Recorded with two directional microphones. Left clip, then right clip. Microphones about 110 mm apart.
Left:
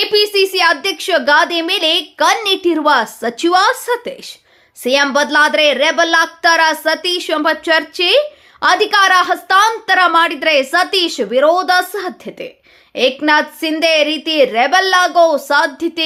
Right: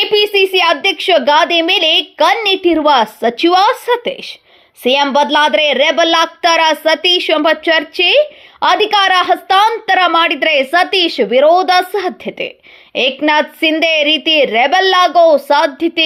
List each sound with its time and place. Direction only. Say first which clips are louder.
0.0 s a woman's voice: right 2 dB; 20° right (ahead or behind)